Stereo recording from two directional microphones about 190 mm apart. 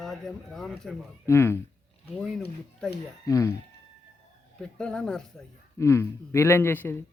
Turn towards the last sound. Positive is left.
turn(degrees=10)  # may be behind; listen again after turning